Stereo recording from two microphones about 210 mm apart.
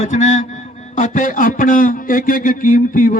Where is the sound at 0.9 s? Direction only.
40° left (ahead or behind).